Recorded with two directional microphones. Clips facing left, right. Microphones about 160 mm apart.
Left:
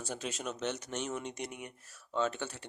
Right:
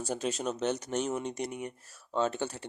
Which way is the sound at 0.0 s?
35° right (ahead or behind).